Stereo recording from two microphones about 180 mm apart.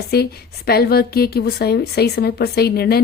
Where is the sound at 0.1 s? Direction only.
60° left (ahead or behind).